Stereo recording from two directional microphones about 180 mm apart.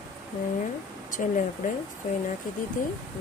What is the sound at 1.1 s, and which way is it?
Speech, 45° left (ahead or behind).